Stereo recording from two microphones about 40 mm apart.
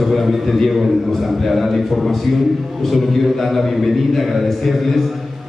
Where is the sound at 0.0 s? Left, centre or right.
Centre.